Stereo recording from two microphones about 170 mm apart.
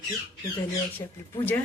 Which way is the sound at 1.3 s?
15° left (ahead or behind).